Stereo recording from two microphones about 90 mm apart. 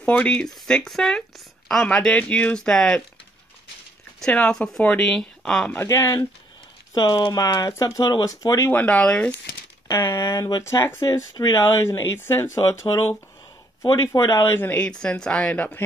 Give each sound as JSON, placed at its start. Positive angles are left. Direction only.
{"t": 0.0, "sound": "speech", "side_deg": 15}
{"t": 4.2, "sound": "speech", "side_deg": 10}
{"t": 5.9, "sound": "speech", "side_deg": 40}
{"t": 8.6, "sound": "speech", "side_deg": 20}
{"t": 9.8, "sound": "speech", "side_deg": 35}
{"t": 13.8, "sound": "speech", "side_deg": 50}
{"t": 14.4, "sound": "speech", "side_deg": 25}
{"t": 14.9, "sound": "speech", "side_deg": 10}